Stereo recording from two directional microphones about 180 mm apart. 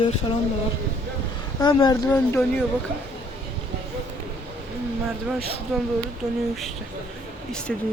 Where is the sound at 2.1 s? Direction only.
10° left (ahead or behind).